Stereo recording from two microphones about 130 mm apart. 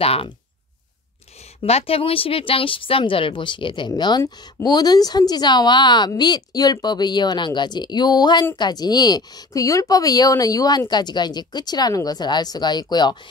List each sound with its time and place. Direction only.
0.0 s speech: 50° left (ahead or behind)
1.6 s speech: 50° left (ahead or behind); by 13.2 s 35° left (ahead or behind)